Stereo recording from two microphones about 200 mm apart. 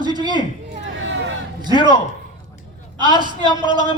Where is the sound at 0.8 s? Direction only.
65° right (ahead or behind).